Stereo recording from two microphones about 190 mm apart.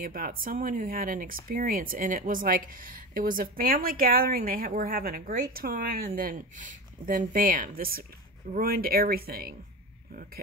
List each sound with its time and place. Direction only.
0.0 s speech: 50° right (ahead or behind)